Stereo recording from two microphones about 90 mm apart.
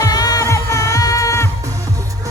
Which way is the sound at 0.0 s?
45° left (ahead or behind).